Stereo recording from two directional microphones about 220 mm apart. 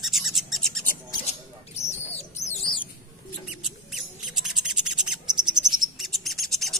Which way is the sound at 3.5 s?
Centre (ahead or behind).